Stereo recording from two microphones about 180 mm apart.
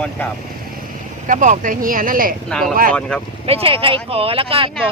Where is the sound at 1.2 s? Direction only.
45° right (ahead or behind).